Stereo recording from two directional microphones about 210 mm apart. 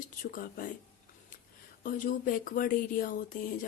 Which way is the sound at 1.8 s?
40° left (ahead or behind).